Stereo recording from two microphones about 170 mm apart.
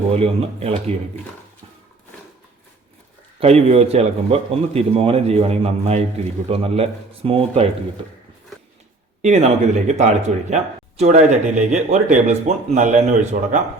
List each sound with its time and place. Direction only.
0.1 s a man's voice: 35° right (ahead or behind)
3.4 s a man's voice: 40° right (ahead or behind)
9.2 s speech: 45° right (ahead or behind)